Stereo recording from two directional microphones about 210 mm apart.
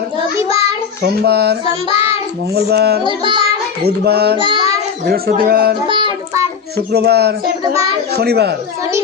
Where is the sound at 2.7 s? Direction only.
50° right (ahead or behind).